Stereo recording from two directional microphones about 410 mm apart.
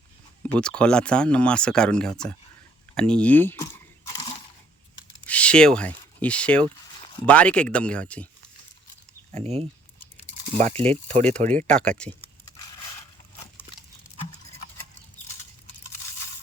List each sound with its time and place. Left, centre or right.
0.4 s speech: centre
5.2 s speech: centre
9.3 s speech: centre
10.8 s speech: centre
11.8 s speech: centre